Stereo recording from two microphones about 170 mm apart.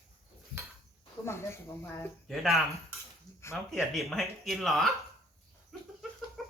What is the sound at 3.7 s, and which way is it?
Speech, centre (ahead or behind).